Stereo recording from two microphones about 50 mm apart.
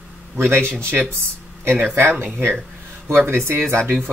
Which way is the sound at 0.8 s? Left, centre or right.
Right.